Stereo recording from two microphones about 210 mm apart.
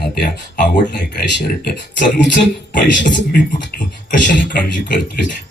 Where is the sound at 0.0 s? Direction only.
50° left (ahead or behind).